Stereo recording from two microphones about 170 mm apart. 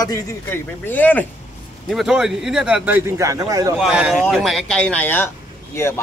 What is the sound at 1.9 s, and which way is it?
A man's voice, centre (ahead or behind).